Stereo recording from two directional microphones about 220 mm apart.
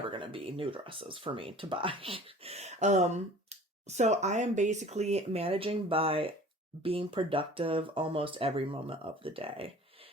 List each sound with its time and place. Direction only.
0.1 s speech: 25° right (ahead or behind)